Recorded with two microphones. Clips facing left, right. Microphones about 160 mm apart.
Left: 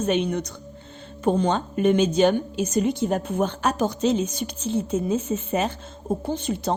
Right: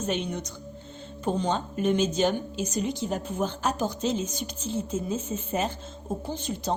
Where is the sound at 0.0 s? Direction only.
65° left (ahead or behind).